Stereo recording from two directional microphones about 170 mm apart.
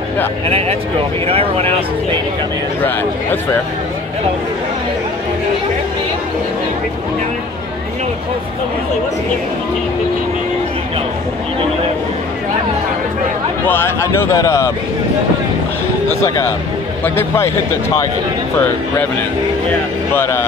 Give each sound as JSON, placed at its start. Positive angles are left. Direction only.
{"t": 0.5, "sound": "speech", "side_deg": -35}
{"t": 13.7, "sound": "speech", "side_deg": 15}
{"t": 16.1, "sound": "speech", "side_deg": 15}
{"t": 20.2, "sound": "speech", "side_deg": 15}